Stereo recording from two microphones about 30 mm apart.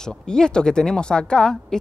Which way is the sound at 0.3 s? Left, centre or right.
Left.